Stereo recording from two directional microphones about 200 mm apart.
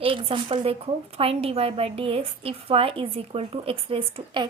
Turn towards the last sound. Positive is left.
turn(degrees=-25)  # may be behind; listen again after turning